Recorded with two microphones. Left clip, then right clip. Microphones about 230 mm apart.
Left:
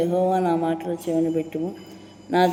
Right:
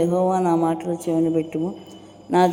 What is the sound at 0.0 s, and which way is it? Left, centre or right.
A woman's voice, right.